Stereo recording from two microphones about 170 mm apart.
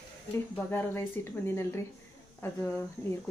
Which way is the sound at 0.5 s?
10° left (ahead or behind).